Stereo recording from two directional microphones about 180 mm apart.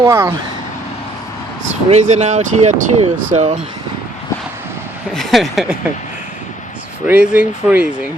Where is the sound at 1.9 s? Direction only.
40° right (ahead or behind).